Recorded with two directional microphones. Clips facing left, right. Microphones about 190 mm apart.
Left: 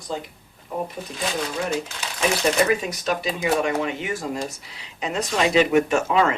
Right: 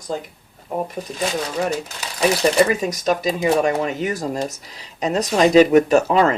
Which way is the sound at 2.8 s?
40° right (ahead or behind).